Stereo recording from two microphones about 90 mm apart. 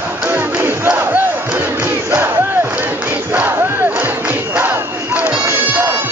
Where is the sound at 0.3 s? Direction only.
20° right (ahead or behind).